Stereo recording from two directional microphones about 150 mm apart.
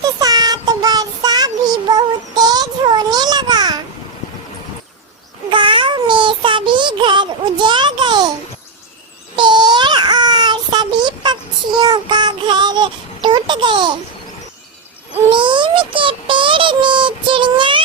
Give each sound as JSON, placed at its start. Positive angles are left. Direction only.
{"t": 0.0, "sound": "child singing", "side_deg": -25}
{"t": 5.5, "sound": "child singing", "side_deg": -35}
{"t": 9.3, "sound": "child singing", "side_deg": -30}
{"t": 15.3, "sound": "child singing", "side_deg": -30}